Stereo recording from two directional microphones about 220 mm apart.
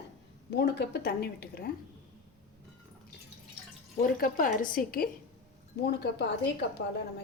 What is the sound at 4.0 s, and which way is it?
A woman's voice, 40° left (ahead or behind).